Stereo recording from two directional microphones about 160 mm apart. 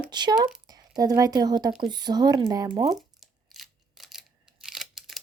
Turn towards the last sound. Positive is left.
turn(degrees=0)  # may be behind; listen again after turning